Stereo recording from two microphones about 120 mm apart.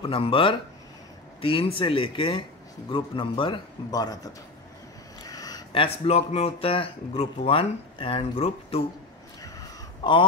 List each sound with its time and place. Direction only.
0.0 s a man's voice: 50° left (ahead or behind); by 4.3 s 30° left (ahead or behind)
5.3 s a sound: 30° left (ahead or behind)
5.7 s speech: 50° left (ahead or behind)
10.0 s a man's voice: 40° left (ahead or behind)